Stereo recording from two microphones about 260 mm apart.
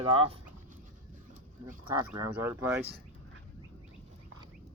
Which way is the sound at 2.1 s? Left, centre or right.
Centre.